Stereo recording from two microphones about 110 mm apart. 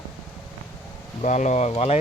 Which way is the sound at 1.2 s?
90° left.